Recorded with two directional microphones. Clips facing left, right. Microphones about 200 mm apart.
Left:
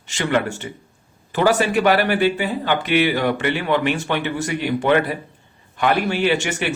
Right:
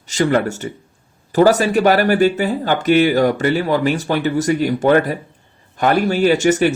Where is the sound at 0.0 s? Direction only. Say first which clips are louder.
Right 5 dB; 40° right (ahead or behind).